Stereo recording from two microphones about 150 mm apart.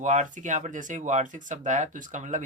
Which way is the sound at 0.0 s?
55° right (ahead or behind).